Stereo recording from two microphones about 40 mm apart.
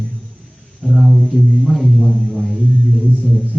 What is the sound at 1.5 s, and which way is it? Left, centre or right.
Speech, centre.